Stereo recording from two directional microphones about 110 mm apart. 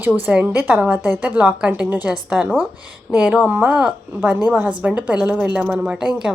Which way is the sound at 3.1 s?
5° right (ahead or behind).